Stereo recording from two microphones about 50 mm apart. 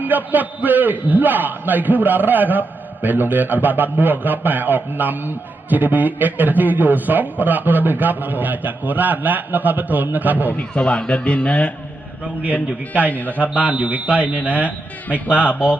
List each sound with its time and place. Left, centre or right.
0.0 s a man's voice: right
10.6 s a man's voice: left
12.4 s a man's voice: right
13.1 s a man's voice: left
13.5 s speech: right